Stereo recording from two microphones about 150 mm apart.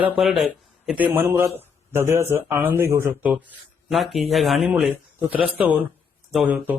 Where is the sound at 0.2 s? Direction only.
Centre (ahead or behind).